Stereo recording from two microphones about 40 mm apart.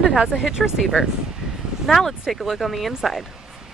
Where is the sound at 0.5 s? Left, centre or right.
Centre.